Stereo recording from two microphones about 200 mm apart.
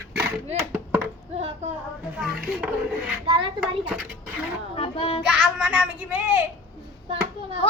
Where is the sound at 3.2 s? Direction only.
25° right (ahead or behind).